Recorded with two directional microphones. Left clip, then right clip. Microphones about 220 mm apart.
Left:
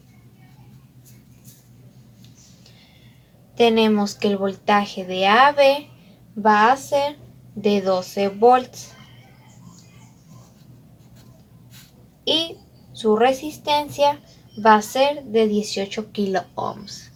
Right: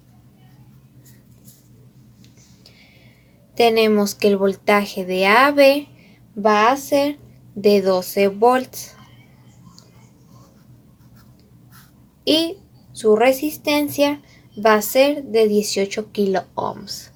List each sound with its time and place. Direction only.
3.5 s a woman's voice: 50° right (ahead or behind)
13.0 s a woman's voice: 45° right (ahead or behind); by 16.9 s 30° right (ahead or behind)